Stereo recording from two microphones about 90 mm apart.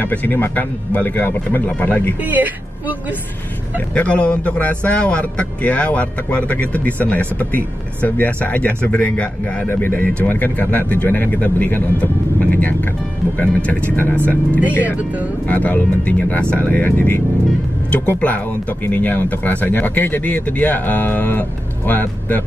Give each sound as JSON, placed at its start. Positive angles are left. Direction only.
{"t": 0.0, "sound": "speech", "side_deg": 20}
{"t": 2.2, "sound": "a woman's voice", "side_deg": -20}
{"t": 3.9, "sound": "a man's voice", "side_deg": 15}